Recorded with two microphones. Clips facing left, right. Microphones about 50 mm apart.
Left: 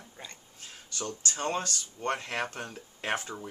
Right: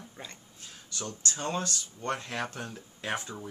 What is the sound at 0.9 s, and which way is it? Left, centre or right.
Speech, left.